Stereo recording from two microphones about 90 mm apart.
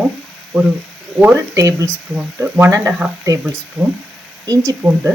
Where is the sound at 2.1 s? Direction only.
25° right (ahead or behind).